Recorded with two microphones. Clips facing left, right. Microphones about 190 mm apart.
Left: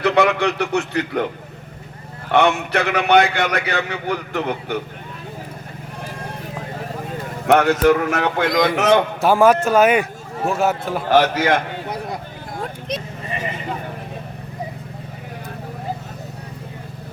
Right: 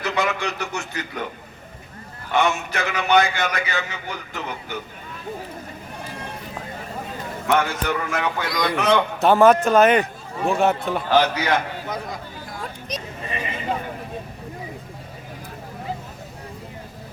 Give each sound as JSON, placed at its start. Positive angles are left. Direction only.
{"t": 0.0, "sound": "a man's voice", "side_deg": 60}
{"t": 2.3, "sound": "a man's voice", "side_deg": 60}
{"t": 7.4, "sound": "a man's voice", "side_deg": 70}
{"t": 9.2, "sound": "a man's voice", "side_deg": 10}
{"t": 11.1, "sound": "a sound", "side_deg": 45}